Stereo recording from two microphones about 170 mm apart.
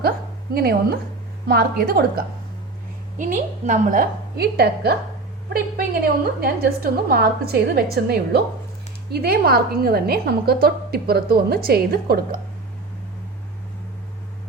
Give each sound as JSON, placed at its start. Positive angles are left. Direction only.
{"t": 0.5, "sound": "a woman's voice", "side_deg": -65}
{"t": 3.2, "sound": "a woman's voice", "side_deg": -45}